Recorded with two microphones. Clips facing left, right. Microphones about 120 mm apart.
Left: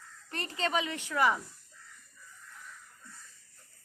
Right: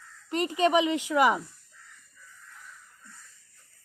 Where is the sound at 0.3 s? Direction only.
15° right (ahead or behind).